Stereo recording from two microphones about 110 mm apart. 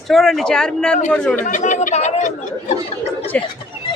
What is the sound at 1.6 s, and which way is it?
Speech, 90° left.